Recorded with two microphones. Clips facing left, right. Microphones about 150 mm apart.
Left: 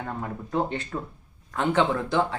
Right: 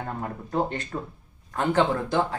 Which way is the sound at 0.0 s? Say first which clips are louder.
Even; 40° right (ahead or behind).